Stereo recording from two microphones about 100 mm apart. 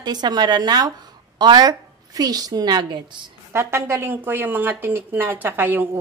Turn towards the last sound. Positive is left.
turn(degrees=-20)  # may be behind; listen again after turning